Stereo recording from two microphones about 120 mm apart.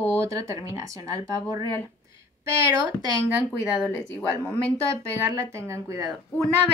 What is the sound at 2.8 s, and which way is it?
Speech, 35° right (ahead or behind).